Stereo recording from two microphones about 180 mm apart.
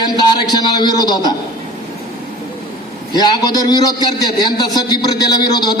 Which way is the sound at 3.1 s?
25° left (ahead or behind).